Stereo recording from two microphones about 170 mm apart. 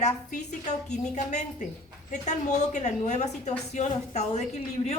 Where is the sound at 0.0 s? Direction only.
45° left (ahead or behind).